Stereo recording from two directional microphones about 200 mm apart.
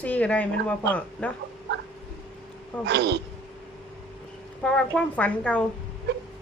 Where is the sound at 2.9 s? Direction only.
60° right (ahead or behind).